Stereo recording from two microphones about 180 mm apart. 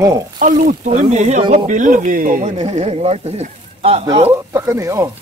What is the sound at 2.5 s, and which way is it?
Speech, 35° right (ahead or behind).